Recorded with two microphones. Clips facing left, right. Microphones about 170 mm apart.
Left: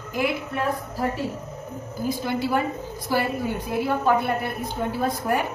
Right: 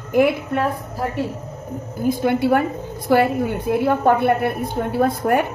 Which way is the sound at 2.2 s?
60° right (ahead or behind).